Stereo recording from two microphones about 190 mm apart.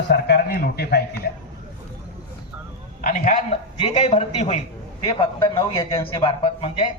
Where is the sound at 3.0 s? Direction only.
45° left (ahead or behind).